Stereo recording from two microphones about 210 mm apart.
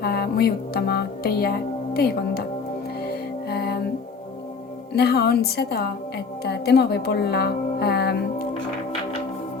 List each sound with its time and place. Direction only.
0.0 s music: 50° left (ahead or behind)
4.9 s a woman's voice: 50° left (ahead or behind)